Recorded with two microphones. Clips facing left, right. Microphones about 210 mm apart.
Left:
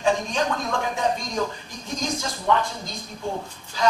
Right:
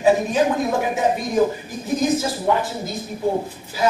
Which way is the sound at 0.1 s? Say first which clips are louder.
Right 8 dB; 5° right (ahead or behind).